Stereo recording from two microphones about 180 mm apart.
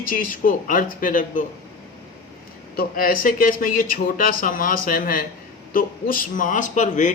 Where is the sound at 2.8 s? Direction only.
55° left (ahead or behind).